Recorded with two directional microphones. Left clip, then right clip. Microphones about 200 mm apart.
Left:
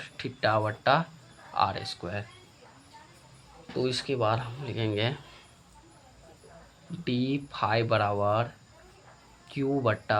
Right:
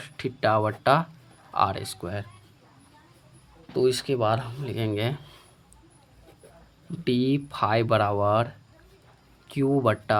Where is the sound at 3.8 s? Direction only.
40° right (ahead or behind).